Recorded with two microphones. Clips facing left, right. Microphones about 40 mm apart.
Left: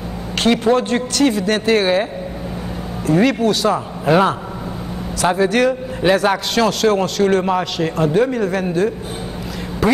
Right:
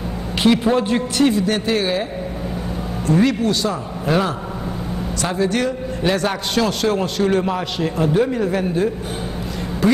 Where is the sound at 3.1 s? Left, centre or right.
Centre.